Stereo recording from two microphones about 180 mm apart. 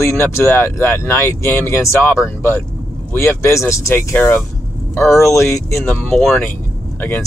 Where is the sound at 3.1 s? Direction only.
15° left (ahead or behind).